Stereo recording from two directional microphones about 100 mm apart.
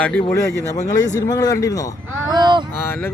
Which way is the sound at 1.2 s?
40° left (ahead or behind).